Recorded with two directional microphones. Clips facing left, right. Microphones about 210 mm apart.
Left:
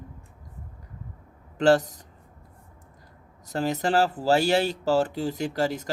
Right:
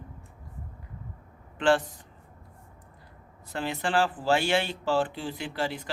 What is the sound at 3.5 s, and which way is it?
Speech, 40° left (ahead or behind).